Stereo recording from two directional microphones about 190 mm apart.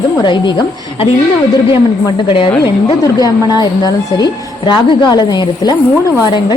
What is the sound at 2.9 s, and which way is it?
A woman's voice, 20° left (ahead or behind).